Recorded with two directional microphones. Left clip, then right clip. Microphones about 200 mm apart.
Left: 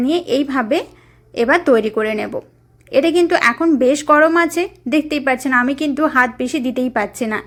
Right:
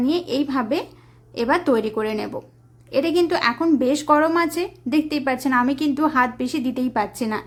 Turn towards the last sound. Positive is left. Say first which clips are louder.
# left 4 dB
turn(degrees=10)  # may be behind; listen again after turning